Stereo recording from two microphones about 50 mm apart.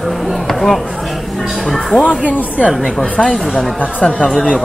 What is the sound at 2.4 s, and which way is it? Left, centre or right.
Speech, left.